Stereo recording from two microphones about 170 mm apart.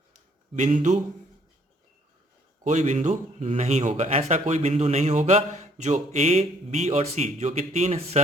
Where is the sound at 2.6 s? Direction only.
45° right (ahead or behind).